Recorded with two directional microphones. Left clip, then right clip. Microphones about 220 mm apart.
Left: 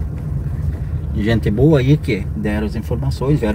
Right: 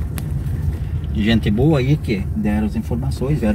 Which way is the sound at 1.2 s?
40° left (ahead or behind).